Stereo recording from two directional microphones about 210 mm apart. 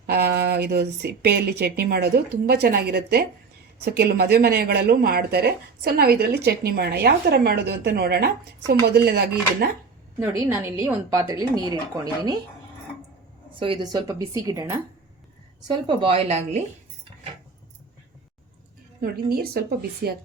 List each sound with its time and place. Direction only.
0.1 s speech: 50° right (ahead or behind)
10.2 s a woman's voice: 10° right (ahead or behind)
13.5 s a woman's voice: 25° right (ahead or behind)
18.9 s speech: 45° right (ahead or behind)